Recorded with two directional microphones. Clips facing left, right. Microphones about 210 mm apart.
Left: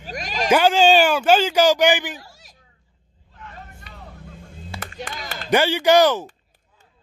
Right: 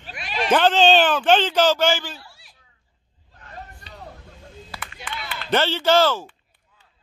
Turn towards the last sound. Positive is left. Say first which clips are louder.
# left 3 dB
turn(degrees=15)  # may be behind; listen again after turning